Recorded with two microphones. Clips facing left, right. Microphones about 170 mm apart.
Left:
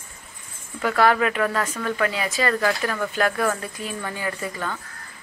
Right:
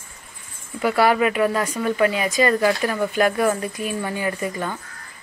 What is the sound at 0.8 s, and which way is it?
A woman's voice, 10° right (ahead or behind).